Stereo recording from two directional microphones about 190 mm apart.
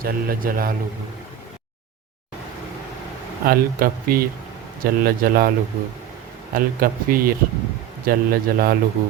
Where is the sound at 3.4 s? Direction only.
50° right (ahead or behind).